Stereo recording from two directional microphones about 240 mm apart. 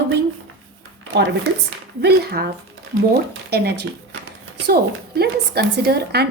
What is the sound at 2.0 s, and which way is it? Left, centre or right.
A woman's voice, right.